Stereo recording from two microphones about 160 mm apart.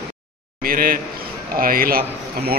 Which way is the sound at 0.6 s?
65° right (ahead or behind).